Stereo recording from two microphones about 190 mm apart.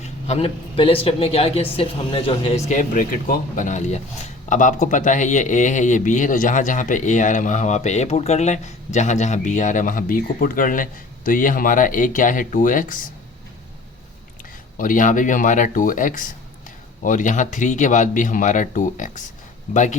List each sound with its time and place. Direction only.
0.0 s speech: 35° left (ahead or behind)
14.8 s speech: 45° left (ahead or behind)